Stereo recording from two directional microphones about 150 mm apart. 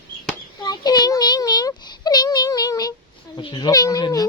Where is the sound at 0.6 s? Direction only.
30° left (ahead or behind).